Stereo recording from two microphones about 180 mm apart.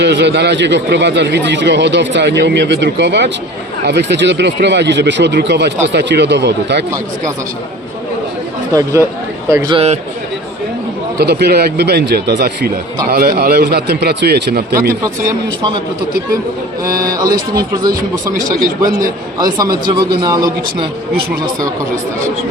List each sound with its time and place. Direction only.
0.0 s a man's voice: 75° right (ahead or behind)
8.7 s speech: 15° right (ahead or behind)
11.2 s a man's voice: 65° right (ahead or behind)
15.0 s speech: 20° right (ahead or behind)
16.8 s speech: 20° right (ahead or behind)
18.6 s a man's voice: 55° right (ahead or behind)
19.4 s speech: 20° right (ahead or behind)